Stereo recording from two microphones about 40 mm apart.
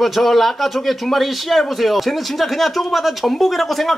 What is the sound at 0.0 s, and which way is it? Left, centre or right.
Speech, centre.